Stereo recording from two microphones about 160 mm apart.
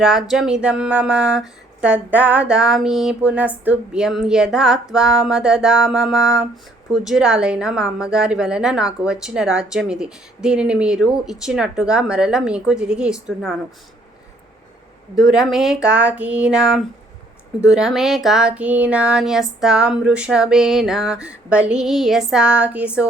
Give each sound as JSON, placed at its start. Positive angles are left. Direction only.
{"t": 0.0, "sound": "a woman's voice", "side_deg": 0}
{"t": 15.3, "sound": "a woman's voice", "side_deg": 0}